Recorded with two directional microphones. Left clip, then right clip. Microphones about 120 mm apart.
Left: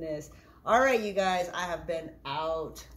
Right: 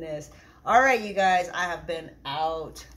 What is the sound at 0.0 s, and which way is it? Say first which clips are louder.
Speech: right 1 dB; 15° left (ahead or behind).